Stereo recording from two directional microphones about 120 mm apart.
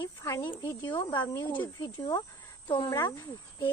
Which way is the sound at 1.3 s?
20° left (ahead or behind).